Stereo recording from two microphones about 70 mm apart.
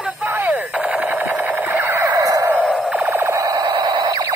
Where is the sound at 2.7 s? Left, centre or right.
Centre.